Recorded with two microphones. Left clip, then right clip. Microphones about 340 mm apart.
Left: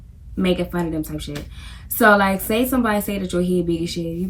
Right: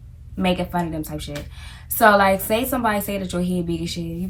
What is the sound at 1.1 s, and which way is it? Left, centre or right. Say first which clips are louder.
Speech: left 1 dB; centre.